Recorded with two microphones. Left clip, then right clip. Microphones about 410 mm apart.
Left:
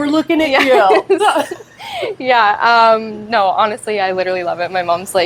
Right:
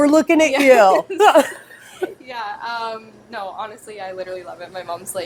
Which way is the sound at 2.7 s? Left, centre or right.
Left.